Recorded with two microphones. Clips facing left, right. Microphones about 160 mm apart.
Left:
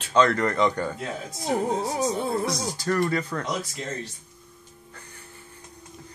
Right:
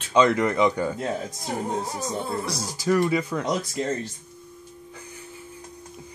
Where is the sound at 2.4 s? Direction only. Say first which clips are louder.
Even; 5° right (ahead or behind).